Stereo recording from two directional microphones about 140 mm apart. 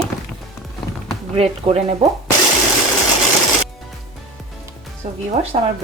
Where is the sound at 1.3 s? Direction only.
45° right (ahead or behind).